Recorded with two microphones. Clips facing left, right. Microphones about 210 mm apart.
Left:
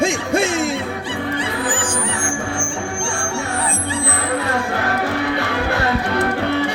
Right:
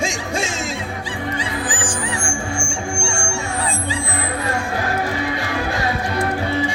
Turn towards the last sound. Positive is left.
turn(degrees=65)  # may be behind; listen again after turning